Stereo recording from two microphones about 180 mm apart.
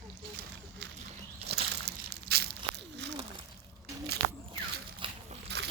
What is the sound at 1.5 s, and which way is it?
Crushing, 65° right (ahead or behind).